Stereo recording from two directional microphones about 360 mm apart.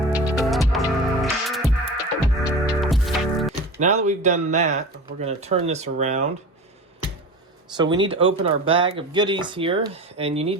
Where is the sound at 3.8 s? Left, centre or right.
Centre.